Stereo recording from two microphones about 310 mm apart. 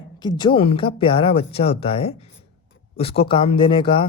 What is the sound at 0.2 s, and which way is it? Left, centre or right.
Speech, centre.